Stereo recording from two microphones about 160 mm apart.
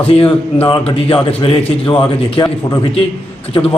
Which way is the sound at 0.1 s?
35° left (ahead or behind).